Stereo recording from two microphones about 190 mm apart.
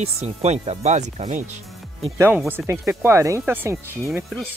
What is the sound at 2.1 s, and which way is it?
Speech, 10° right (ahead or behind).